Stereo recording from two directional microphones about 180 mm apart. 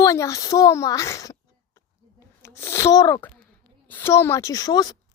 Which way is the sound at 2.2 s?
15° left (ahead or behind).